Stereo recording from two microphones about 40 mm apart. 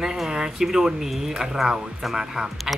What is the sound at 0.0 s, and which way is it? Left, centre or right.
Speech, centre.